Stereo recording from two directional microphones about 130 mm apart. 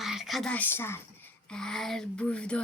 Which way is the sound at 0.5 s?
15° left (ahead or behind).